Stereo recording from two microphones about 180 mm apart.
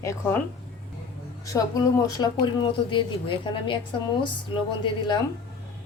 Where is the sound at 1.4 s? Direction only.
20° left (ahead or behind).